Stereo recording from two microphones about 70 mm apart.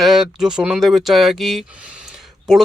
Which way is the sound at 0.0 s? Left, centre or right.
Centre.